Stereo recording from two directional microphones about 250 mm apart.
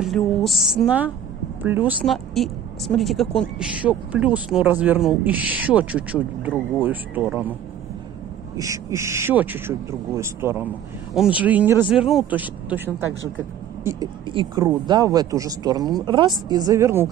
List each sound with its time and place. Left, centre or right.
0.0 s speech: centre
8.5 s speech: centre